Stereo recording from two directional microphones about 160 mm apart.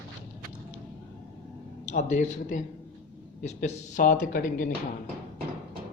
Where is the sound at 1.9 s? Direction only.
50° left (ahead or behind).